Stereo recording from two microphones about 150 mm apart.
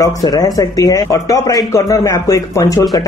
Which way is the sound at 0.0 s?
25° left (ahead or behind).